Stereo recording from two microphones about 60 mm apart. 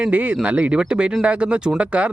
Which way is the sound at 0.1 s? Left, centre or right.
Right.